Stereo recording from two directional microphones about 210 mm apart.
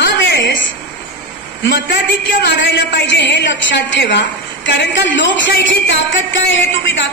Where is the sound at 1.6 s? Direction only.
60° left (ahead or behind).